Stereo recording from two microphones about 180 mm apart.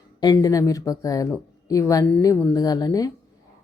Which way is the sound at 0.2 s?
20° left (ahead or behind).